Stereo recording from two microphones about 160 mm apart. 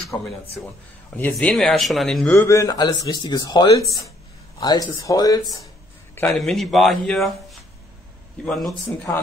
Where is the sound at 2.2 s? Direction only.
15° left (ahead or behind).